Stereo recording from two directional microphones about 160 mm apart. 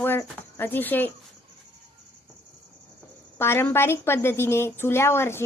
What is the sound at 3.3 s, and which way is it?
A woman's voice, 15° left (ahead or behind).